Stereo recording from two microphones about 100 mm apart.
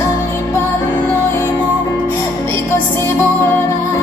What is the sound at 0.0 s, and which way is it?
Music, 25° left (ahead or behind).